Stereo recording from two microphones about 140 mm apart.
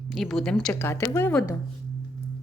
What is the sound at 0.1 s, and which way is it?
Speech, centre (ahead or behind).